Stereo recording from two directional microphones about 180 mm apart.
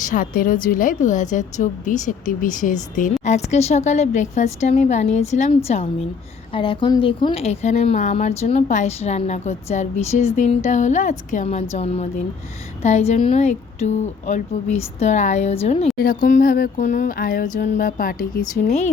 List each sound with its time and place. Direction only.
0.0 s a woman's voice: 50° left (ahead or behind)
16.0 s a woman's voice: 50° left (ahead or behind)